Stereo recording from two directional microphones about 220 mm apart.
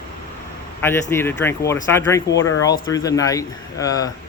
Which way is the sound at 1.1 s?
10° left (ahead or behind).